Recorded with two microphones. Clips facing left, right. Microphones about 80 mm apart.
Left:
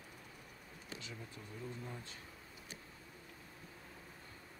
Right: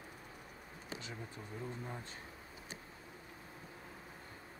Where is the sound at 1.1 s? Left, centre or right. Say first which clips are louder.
Right 3 dB; right.